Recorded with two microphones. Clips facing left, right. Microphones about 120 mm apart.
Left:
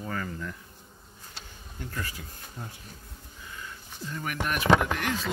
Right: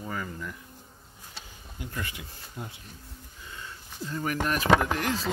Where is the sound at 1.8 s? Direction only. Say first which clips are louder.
Even; 20° right (ahead or behind).